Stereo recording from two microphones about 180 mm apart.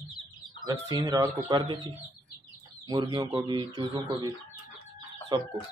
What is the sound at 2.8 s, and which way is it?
Speech, 25° right (ahead or behind).